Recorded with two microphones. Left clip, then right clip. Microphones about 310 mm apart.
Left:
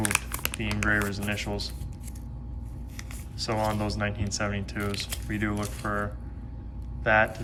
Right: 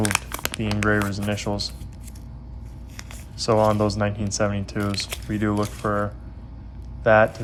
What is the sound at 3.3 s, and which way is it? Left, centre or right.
Speech, centre.